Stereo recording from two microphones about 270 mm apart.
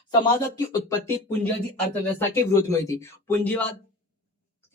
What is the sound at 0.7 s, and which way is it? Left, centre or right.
Speech, centre.